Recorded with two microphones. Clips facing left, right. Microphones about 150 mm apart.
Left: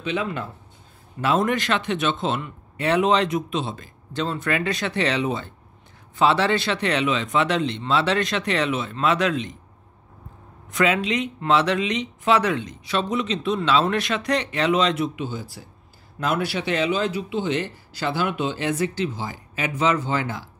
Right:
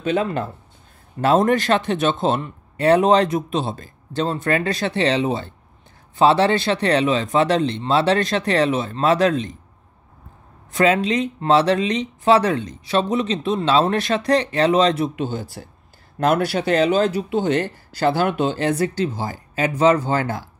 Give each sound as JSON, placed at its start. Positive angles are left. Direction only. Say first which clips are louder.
{"t": 0.0, "sound": "speech", "louder": "right 5 dB", "side_deg": -45}
{"t": 10.7, "sound": "speech", "louder": "right 4 dB", "side_deg": -35}
{"t": 15.1, "sound": "speech", "louder": "right 5 dB", "side_deg": -60}
{"t": 16.2, "sound": "speech", "louder": "right 6 dB", "side_deg": -45}